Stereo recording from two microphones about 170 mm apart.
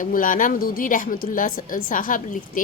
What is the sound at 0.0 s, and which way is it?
A woman's voice, 50° left (ahead or behind).